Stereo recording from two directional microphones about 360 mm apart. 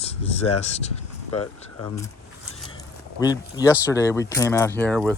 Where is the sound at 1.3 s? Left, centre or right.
Left.